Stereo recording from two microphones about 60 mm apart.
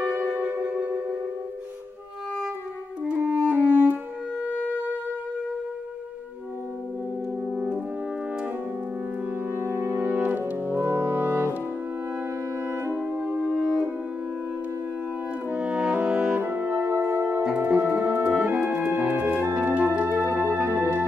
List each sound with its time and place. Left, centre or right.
0.4 s music: right
3.2 s music: right
7.5 s french horn: centre
9.6 s brass instrument: right
12.9 s music: right
13.4 s french horn: centre
15.5 s french horn: centre
16.1 s music: centre
16.3 s french horn: right
16.8 s music: right
17.6 s music: right
20.1 s music: right